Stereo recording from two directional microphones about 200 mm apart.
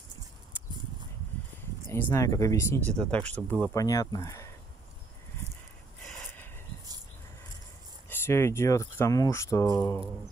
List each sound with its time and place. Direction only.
1.9 s speech: 10° left (ahead or behind)
3.7 s speech: 15° left (ahead or behind)
6.0 s snort: 10° left (ahead or behind)
8.1 s speech: 15° left (ahead or behind)